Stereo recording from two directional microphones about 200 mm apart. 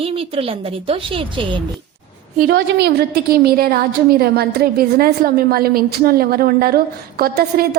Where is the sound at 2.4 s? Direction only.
55° right (ahead or behind).